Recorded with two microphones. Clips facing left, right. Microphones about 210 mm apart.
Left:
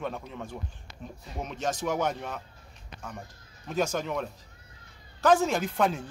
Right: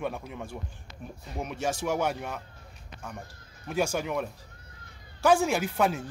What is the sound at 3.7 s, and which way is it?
Speech, 10° right (ahead or behind).